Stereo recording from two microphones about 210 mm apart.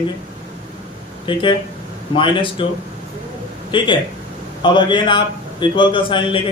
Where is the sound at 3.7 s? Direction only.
20° left (ahead or behind).